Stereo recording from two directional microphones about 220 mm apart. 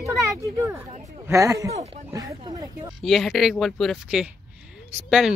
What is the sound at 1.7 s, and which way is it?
Speech, 30° right (ahead or behind).